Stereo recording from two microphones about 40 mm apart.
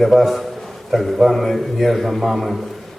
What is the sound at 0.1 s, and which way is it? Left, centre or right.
A man's voice, centre.